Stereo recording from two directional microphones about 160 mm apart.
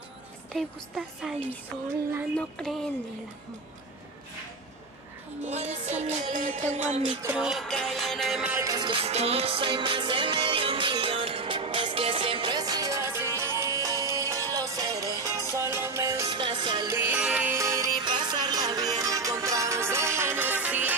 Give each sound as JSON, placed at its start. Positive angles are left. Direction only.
{"t": 0.5, "sound": "music", "side_deg": 0}
{"t": 2.3, "sound": "music", "side_deg": 0}
{"t": 5.5, "sound": "music", "side_deg": -45}
{"t": 7.2, "sound": "music", "side_deg": -5}
{"t": 8.5, "sound": "music", "side_deg": -25}
{"t": 16.3, "sound": "music", "side_deg": -30}
{"t": 16.8, "sound": "music", "side_deg": -15}